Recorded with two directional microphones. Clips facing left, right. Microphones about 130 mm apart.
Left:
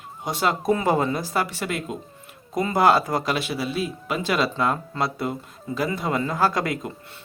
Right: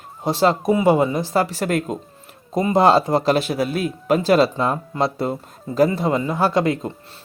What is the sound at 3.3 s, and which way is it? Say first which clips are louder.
Speech: right 6 dB; 40° right (ahead or behind).